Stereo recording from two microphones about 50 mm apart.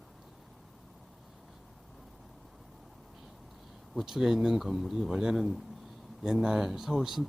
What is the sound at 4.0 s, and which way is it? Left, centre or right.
Speech, centre.